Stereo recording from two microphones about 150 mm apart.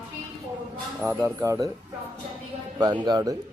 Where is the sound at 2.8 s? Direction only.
30° right (ahead or behind).